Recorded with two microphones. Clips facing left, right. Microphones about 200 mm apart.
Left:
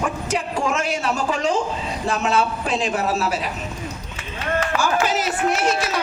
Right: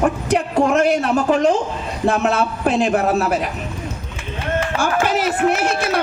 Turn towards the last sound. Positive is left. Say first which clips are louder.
# right 3 dB
turn(degrees=-60)  # may be behind; listen again after turning